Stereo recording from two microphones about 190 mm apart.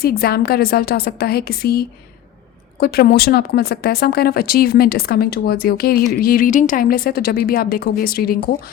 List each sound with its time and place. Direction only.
0.0 s a woman's voice: 55° left (ahead or behind)